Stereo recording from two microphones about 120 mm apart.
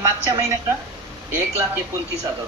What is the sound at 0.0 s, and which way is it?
Speech, 25° right (ahead or behind).